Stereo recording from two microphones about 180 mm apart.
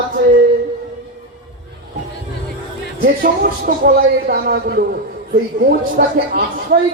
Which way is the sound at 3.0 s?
55° right (ahead or behind).